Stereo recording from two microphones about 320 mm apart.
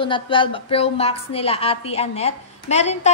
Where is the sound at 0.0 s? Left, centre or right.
Centre.